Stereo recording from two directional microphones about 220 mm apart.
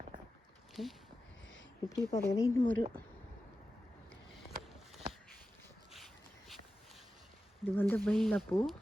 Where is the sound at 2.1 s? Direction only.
15° left (ahead or behind).